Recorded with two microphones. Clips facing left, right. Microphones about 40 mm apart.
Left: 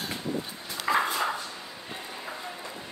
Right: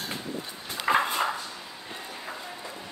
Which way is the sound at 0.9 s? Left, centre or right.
Right.